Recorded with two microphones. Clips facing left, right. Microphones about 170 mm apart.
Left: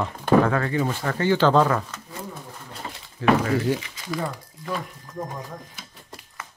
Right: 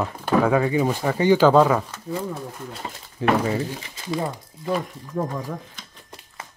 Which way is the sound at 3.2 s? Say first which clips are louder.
Left 1 dB; 20° right (ahead or behind).